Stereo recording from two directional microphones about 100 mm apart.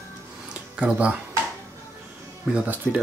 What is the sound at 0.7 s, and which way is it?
Speech, 10° right (ahead or behind).